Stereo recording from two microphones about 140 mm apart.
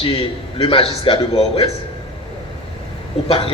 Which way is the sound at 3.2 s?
40° left (ahead or behind).